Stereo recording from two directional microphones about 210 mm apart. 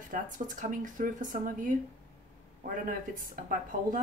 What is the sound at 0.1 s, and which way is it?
Speech, 40° right (ahead or behind).